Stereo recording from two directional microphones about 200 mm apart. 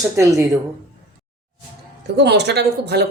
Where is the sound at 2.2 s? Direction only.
55° right (ahead or behind).